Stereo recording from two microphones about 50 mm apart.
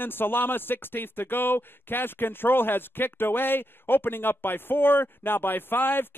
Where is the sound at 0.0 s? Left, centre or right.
Left.